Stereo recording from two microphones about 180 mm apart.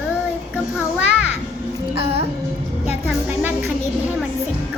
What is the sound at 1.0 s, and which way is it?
Music, 10° right (ahead or behind).